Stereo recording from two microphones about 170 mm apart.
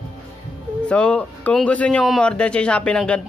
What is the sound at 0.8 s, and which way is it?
Speech, 5° left (ahead or behind).